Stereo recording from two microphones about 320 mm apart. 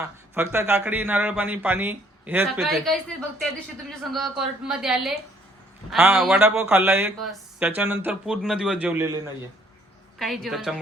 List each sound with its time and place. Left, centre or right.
0.0 s a man's voice: centre
4.1 s a man's voice: centre
10.2 s a man's voice: centre